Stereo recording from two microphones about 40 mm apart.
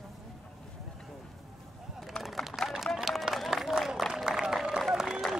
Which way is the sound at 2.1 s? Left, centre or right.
Left.